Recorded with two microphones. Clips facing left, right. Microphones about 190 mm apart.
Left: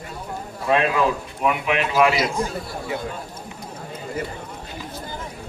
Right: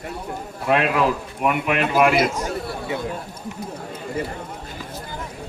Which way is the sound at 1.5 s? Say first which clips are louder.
Right 2 dB; 55° right (ahead or behind).